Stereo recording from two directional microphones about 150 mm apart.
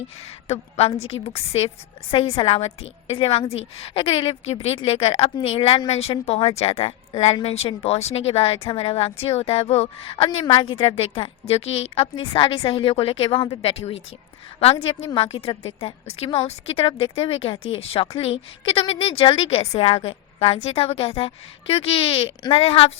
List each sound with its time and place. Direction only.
0.2 s a woman's voice: 45° left (ahead or behind)